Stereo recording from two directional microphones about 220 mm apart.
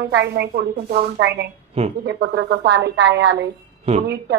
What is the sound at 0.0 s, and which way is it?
A woman's voice, 50° right (ahead or behind).